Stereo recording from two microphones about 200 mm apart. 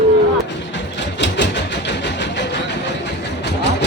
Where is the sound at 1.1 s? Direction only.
60° left (ahead or behind).